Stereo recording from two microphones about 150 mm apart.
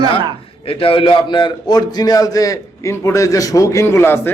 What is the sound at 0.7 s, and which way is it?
A man's voice, 35° left (ahead or behind).